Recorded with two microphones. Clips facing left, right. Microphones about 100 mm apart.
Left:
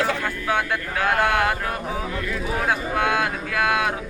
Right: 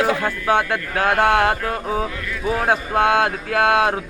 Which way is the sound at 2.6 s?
35° right (ahead or behind).